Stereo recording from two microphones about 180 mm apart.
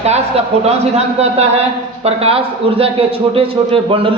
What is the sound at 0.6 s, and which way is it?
A man's voice, 35° right (ahead or behind).